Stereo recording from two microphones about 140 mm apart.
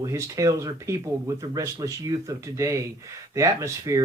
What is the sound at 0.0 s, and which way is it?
Speech, 20° right (ahead or behind).